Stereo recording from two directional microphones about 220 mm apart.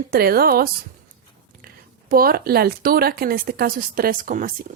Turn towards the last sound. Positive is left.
turn(degrees=-40)  # may be behind; listen again after turning